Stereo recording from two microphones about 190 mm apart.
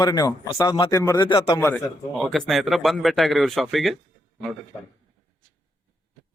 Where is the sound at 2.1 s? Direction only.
Centre (ahead or behind).